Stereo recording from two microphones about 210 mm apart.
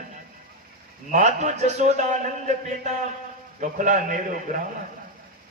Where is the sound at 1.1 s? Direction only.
35° right (ahead or behind).